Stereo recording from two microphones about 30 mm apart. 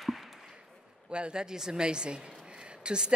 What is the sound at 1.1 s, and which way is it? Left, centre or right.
A man's voice, right.